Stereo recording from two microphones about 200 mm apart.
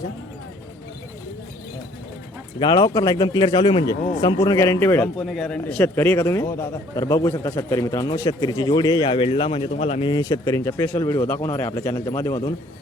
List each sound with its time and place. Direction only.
2.6 s a man's voice: 20° left (ahead or behind)